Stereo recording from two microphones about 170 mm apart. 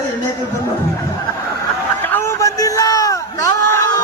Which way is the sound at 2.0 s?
15° left (ahead or behind).